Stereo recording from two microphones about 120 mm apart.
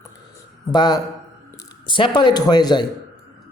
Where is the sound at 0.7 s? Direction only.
35° left (ahead or behind).